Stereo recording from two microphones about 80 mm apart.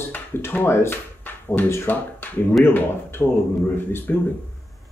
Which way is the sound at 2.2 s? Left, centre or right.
Left.